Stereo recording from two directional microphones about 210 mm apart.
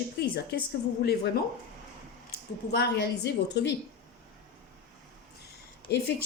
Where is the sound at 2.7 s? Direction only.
55° left (ahead or behind).